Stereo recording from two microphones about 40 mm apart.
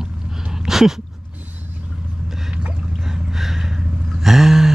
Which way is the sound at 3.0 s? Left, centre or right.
Centre.